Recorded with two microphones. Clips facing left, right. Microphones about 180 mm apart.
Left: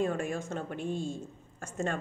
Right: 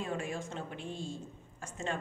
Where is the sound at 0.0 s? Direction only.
45° left (ahead or behind).